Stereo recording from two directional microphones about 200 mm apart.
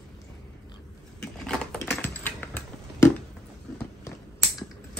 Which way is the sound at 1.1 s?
5° left (ahead or behind).